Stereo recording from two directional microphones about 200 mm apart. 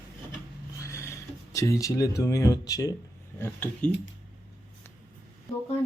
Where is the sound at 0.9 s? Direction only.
15° left (ahead or behind).